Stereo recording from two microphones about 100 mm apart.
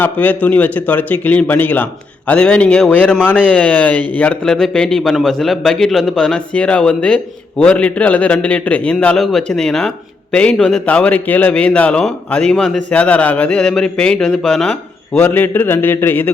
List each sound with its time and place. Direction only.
0.0 s speech: 15° left (ahead or behind)
4.4 s a man's voice: 5° left (ahead or behind)
15.1 s a man's voice: 20° left (ahead or behind)